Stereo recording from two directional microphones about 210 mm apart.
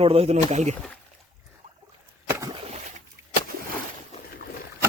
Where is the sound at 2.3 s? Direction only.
15° right (ahead or behind).